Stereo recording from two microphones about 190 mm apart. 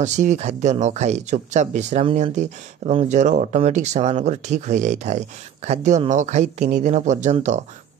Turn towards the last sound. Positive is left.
turn(degrees=-40)  # may be behind; listen again after turning